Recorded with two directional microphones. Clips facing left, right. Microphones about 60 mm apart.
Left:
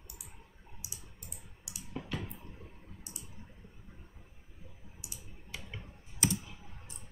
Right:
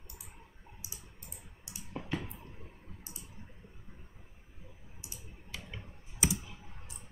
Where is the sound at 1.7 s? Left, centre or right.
Right.